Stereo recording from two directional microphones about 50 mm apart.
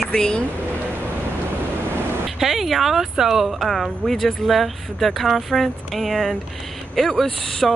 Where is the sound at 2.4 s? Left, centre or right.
Centre.